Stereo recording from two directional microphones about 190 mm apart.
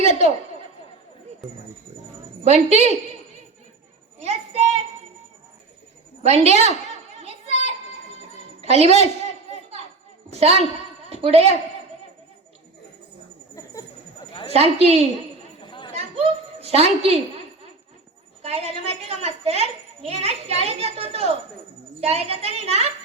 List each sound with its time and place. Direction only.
0.0 s speech: 35° right (ahead or behind)
2.4 s a child's voice: 35° right (ahead or behind)
4.2 s child singing: 35° right (ahead or behind)
6.2 s a child's voice: 35° right (ahead or behind)
6.9 s children playing: 35° right (ahead or behind)
8.6 s a sound: 30° right (ahead or behind)
10.3 s a woman's voice: 30° right (ahead or behind)
14.4 s a child's voice: 30° right (ahead or behind)
15.6 s chatter: 25° left (ahead or behind)
16.0 s a sound: 30° right (ahead or behind)
18.4 s a child's voice: 30° right (ahead or behind)